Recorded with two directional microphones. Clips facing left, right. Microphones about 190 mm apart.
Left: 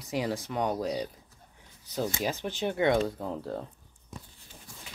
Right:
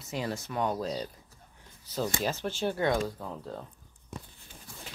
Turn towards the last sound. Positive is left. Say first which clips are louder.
# left 5 dB
turn(degrees=30)  # may be behind; listen again after turning